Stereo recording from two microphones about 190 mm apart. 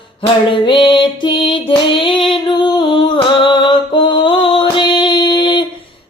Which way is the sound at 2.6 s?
25° left (ahead or behind).